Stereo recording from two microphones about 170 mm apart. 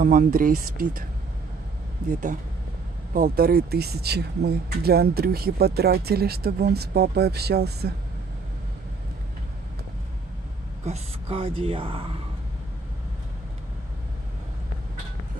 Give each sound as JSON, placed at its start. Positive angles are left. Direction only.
{"t": 0.0, "sound": "speech", "side_deg": -55}
{"t": 2.0, "sound": "speech", "side_deg": -45}
{"t": 3.1, "sound": "speech", "side_deg": -60}
{"t": 10.9, "sound": "speech", "side_deg": -35}